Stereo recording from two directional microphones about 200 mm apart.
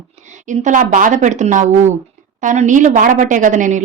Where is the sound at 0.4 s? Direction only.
40° right (ahead or behind).